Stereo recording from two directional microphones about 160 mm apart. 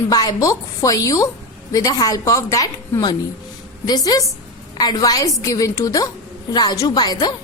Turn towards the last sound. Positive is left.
turn(degrees=25)  # may be behind; listen again after turning